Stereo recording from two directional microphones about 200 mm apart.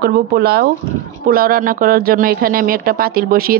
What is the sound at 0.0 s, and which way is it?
Speech, 50° right (ahead or behind).